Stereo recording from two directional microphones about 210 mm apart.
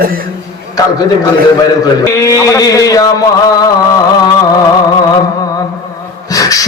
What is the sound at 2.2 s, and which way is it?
Music, 15° left (ahead or behind).